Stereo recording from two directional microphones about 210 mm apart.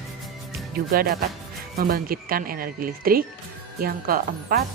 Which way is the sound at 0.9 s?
45° right (ahead or behind).